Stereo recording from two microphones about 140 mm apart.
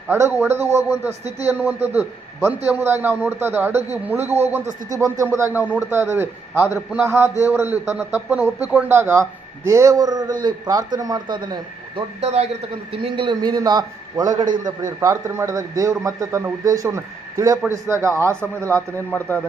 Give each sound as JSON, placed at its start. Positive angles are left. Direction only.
{"t": 0.1, "sound": "a man's voice", "side_deg": -15}
{"t": 12.2, "sound": "a man's voice", "side_deg": -50}
{"t": 12.9, "sound": "speech", "side_deg": -35}
{"t": 18.9, "sound": "speech", "side_deg": 15}